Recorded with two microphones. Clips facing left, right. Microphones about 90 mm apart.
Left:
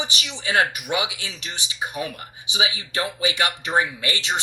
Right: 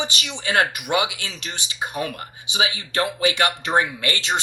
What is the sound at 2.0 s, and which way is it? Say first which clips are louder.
Speech: right 2 dB; 40° right (ahead or behind).